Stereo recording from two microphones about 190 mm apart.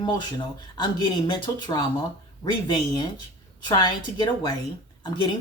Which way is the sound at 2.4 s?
25° left (ahead or behind).